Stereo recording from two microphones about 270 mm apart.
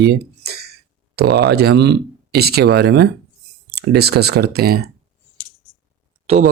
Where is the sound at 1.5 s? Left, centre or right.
Right.